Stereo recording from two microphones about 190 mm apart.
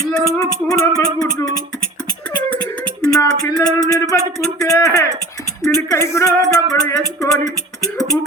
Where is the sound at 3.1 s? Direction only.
20° left (ahead or behind).